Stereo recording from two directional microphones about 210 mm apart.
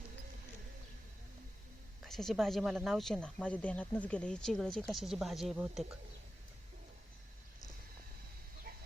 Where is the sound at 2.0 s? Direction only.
Centre (ahead or behind).